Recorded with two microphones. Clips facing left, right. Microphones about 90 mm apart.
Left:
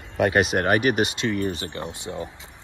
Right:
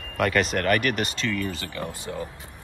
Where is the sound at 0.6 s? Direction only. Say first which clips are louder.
Left 3 dB; 50° right (ahead or behind).